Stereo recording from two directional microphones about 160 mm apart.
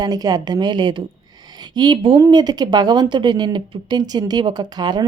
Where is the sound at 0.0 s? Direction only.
25° right (ahead or behind).